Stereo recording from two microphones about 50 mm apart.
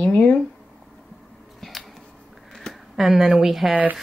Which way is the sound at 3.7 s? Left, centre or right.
Right.